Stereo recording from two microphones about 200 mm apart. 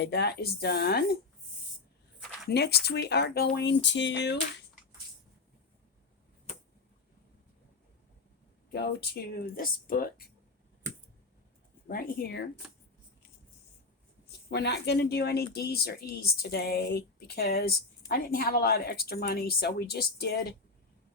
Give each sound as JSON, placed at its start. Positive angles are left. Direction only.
{"t": 0.0, "sound": "speech", "side_deg": 55}
{"t": 2.5, "sound": "speech", "side_deg": 55}
{"t": 8.7, "sound": "speech", "side_deg": 55}
{"t": 11.9, "sound": "speech", "side_deg": 45}
{"t": 14.3, "sound": "speech", "side_deg": 55}